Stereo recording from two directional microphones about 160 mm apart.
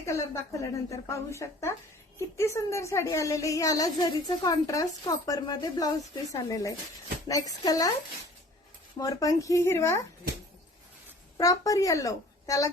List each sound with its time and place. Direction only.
0.0 s a woman's voice: 20° left (ahead or behind)
9.0 s a woman's voice: 20° left (ahead or behind)
11.3 s a woman's voice: 20° left (ahead or behind)